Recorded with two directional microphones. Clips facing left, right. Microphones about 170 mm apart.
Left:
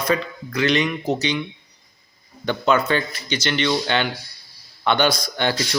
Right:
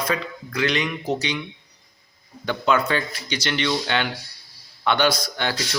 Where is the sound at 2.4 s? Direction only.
5° right (ahead or behind).